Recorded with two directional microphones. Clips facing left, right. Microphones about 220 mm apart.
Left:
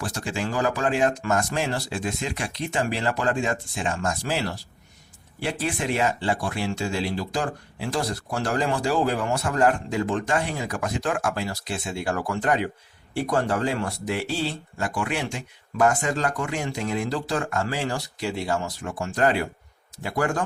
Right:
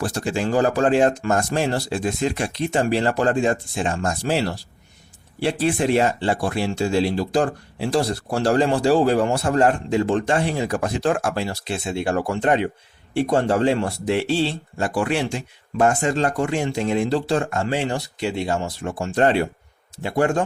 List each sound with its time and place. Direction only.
0.0 s speech: 35° right (ahead or behind)